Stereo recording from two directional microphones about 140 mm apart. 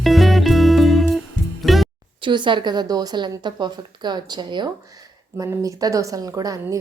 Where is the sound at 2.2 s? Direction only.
35° right (ahead or behind).